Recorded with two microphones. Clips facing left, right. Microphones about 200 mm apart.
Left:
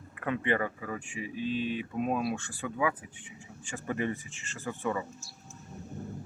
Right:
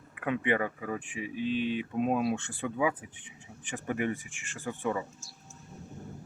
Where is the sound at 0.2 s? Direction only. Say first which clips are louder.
Right 1 dB; 15° right (ahead or behind).